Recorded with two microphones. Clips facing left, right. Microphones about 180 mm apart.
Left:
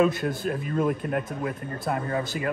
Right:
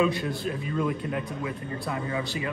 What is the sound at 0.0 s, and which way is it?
A man's voice, 45° left (ahead or behind).